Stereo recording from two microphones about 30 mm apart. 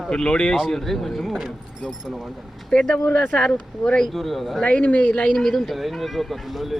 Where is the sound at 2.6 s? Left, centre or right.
Left.